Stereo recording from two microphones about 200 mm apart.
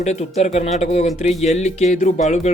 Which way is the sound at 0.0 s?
35° left (ahead or behind).